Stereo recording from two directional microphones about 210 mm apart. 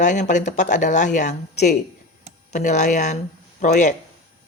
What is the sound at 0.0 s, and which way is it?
Speech, 35° left (ahead or behind).